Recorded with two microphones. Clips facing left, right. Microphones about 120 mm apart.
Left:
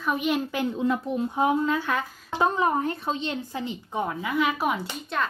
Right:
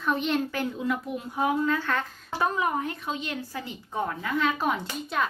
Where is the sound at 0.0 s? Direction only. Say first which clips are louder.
Left 1 dB; 10° left (ahead or behind).